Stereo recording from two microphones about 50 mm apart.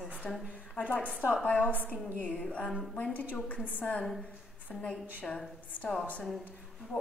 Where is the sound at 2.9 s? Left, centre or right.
Left.